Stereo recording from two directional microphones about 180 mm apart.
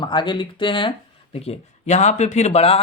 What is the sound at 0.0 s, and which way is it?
Speech, 25° left (ahead or behind).